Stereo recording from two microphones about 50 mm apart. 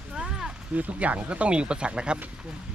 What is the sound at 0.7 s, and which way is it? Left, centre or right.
Speech, right.